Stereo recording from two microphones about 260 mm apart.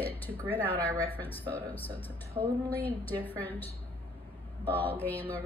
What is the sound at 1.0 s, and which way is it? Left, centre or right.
A woman's voice, centre.